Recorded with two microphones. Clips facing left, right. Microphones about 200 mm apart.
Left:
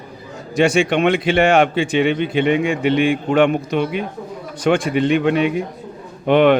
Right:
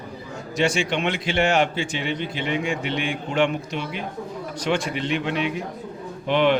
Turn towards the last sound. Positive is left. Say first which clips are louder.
# left 7 dB
turn(degrees=55)  # may be behind; listen again after turning